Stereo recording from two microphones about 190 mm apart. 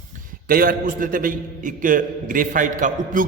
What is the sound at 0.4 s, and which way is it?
A man's voice, 50° right (ahead or behind).